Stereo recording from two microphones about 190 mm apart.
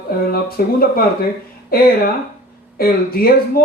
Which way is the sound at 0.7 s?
50° left (ahead or behind).